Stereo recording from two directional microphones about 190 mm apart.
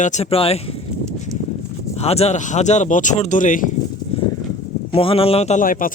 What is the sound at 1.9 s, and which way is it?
A man's voice, 35° left (ahead or behind).